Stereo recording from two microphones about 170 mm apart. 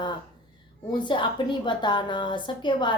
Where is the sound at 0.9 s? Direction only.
30° left (ahead or behind).